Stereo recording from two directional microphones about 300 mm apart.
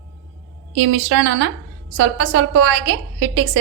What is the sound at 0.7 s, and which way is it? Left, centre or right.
A woman's voice, right.